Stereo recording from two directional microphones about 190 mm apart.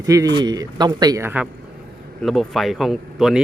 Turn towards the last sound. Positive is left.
turn(degrees=0)  # may be behind; listen again after turning